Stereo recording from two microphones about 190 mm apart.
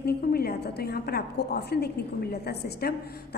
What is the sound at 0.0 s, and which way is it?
A woman's voice, 55° left (ahead or behind).